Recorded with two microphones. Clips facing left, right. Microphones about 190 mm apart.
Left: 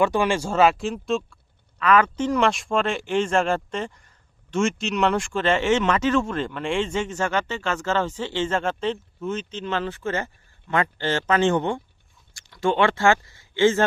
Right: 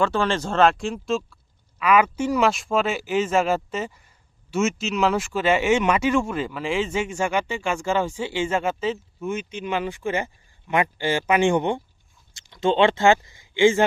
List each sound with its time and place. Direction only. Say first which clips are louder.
0.0 s speech: left 1 dB; 15° left (ahead or behind); by 13.8 s 15° right (ahead or behind)